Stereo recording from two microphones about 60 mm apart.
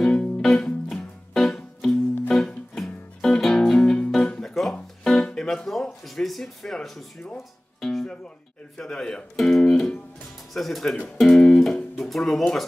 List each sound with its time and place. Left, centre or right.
0.0 s music: centre
4.2 s music: centre
8.7 s speech: centre